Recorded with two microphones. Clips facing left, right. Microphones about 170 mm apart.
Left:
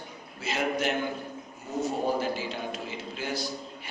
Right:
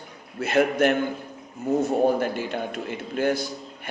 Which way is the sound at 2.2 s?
55° right (ahead or behind).